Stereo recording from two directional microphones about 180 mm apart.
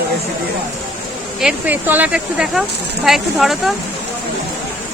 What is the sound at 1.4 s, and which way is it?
Speech, 5° right (ahead or behind).